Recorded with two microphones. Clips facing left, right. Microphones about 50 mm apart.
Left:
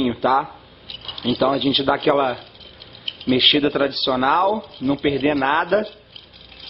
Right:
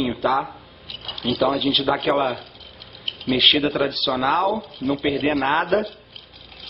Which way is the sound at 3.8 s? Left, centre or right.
Centre.